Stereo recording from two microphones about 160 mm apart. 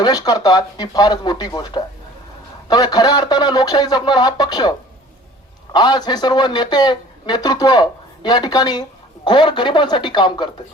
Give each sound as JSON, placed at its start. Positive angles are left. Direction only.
{"t": 0.0, "sound": "a man's voice", "side_deg": 25}
{"t": 5.7, "sound": "a man's voice", "side_deg": 25}